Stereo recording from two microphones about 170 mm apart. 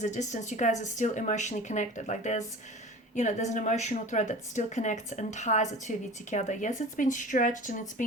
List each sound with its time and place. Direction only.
0.0 s a woman's voice: 45° left (ahead or behind)